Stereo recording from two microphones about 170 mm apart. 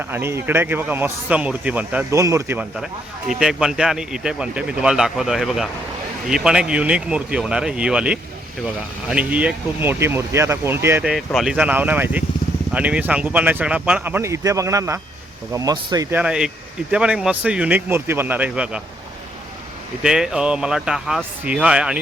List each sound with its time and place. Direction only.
0.1 s speech: 15° right (ahead or behind)
11.3 s speech: centre (ahead or behind); by 16.0 s 25° right (ahead or behind)
16.0 s speech: 10° right (ahead or behind)
20.0 s speech: 5° right (ahead or behind)